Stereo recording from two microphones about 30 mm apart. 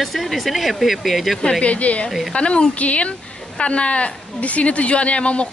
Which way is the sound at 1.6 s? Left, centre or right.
Left.